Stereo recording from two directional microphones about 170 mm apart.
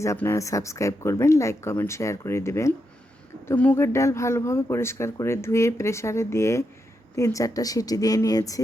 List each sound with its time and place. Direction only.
0.0 s speech: 15° left (ahead or behind)